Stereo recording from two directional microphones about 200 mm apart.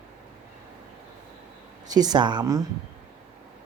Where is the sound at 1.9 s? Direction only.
20° right (ahead or behind).